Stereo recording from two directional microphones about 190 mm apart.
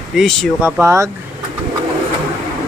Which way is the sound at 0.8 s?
15° right (ahead or behind).